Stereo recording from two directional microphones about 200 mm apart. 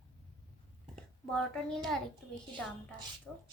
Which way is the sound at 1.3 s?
5° left (ahead or behind).